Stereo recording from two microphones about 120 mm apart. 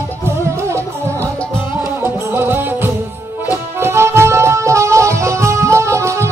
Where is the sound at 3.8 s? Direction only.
20° right (ahead or behind).